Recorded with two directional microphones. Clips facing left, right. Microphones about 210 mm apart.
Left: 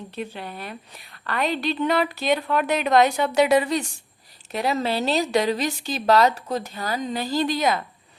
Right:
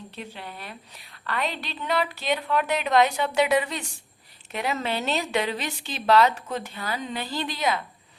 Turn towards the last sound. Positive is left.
turn(degrees=40)  # may be behind; listen again after turning